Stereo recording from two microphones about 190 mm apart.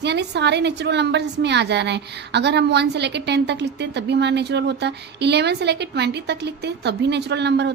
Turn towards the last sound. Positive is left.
turn(degrees=-65)  # may be behind; listen again after turning